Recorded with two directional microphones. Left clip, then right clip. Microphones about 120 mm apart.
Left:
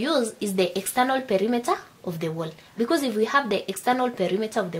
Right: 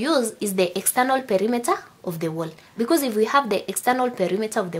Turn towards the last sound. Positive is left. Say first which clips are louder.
# right 2 dB
turn(degrees=-35)  # may be behind; listen again after turning